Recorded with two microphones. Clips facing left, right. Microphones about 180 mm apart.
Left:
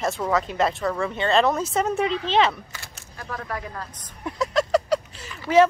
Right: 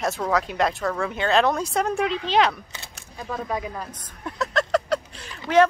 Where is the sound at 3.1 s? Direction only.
20° right (ahead or behind).